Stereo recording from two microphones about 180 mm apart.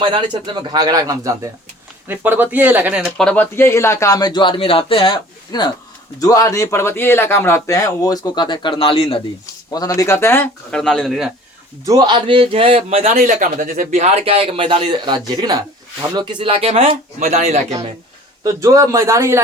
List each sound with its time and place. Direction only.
0.0 s speech: 25° right (ahead or behind); by 9.2 s 30° left (ahead or behind)
9.7 s speech: 20° left (ahead or behind); by 11.3 s centre (ahead or behind)
11.9 s speech: 25° right (ahead or behind)
13.1 s speech: 50° right (ahead or behind)
18.4 s speech: 20° right (ahead or behind)